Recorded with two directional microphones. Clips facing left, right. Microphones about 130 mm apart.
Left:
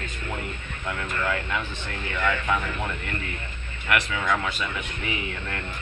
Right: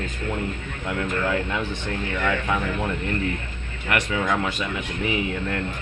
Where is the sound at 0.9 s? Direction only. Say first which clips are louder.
Right 4 dB; 20° right (ahead or behind).